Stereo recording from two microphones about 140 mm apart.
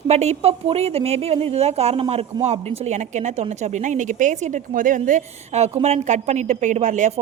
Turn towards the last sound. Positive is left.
turn(degrees=-60)  # may be behind; listen again after turning